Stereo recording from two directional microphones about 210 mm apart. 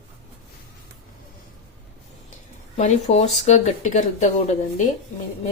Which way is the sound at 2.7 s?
30° left (ahead or behind).